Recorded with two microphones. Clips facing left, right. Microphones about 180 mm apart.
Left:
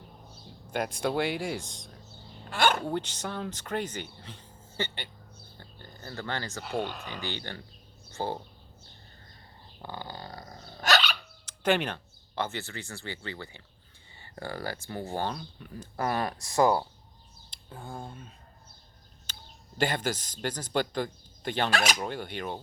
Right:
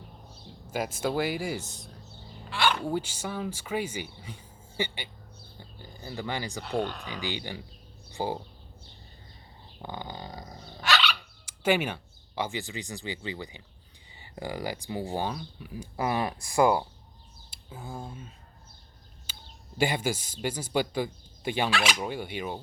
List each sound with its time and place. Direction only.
0.7 s speech: 5° right (ahead or behind)
2.5 s a sound: 45° left (ahead or behind)
2.8 s speech: 5° right (ahead or behind)
5.5 s a sound: 10° right (ahead or behind)
6.6 s speech: centre (ahead or behind)
7.1 s speech: 15° right (ahead or behind)
9.8 s dog: 15° right (ahead or behind)
10.8 s dog: 40° left (ahead or behind)
11.4 s a sound: 10° right (ahead or behind)
12.4 s speech: 15° right (ahead or behind)
19.8 s speech: 10° right (ahead or behind)
21.7 s a sound: 40° left (ahead or behind)
21.9 s speech: 10° right (ahead or behind)